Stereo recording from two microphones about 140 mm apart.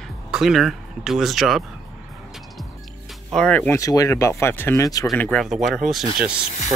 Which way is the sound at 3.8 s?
25° left (ahead or behind).